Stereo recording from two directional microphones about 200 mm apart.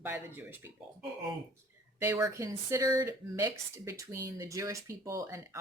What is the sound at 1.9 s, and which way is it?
Speech, 15° right (ahead or behind).